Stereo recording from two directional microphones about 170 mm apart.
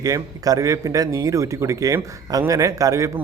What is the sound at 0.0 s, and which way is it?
A man's voice, 20° right (ahead or behind).